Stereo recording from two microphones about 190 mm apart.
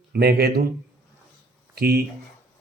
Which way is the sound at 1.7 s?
55° right (ahead or behind).